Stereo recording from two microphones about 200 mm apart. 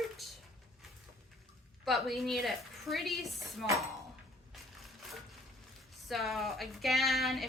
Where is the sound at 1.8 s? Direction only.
Centre (ahead or behind).